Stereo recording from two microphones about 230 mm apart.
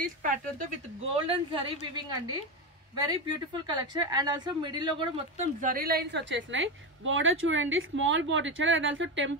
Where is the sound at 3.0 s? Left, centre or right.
Centre.